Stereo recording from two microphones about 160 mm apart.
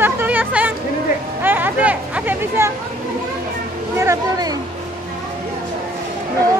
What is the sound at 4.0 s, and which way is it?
Speech, 20° right (ahead or behind).